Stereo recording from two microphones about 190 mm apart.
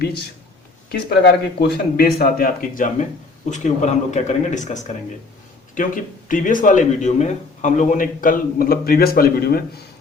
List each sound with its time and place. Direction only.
0.9 s speech: 60° left (ahead or behind)